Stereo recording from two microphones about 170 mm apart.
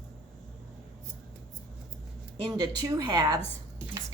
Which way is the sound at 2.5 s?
20° right (ahead or behind).